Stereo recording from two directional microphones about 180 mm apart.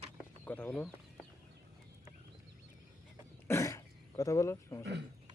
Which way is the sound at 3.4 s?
15° left (ahead or behind).